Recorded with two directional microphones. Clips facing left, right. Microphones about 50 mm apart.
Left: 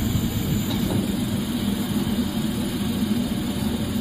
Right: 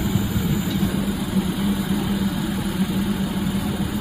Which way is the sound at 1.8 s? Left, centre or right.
Right.